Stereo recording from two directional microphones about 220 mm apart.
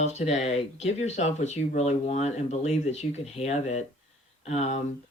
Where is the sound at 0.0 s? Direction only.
30° left (ahead or behind).